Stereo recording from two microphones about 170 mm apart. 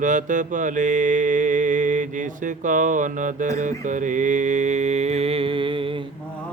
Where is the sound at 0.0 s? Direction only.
50° right (ahead or behind); by 6.0 s 30° right (ahead or behind).